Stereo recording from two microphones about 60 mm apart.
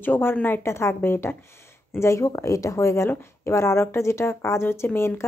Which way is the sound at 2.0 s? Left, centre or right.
Left.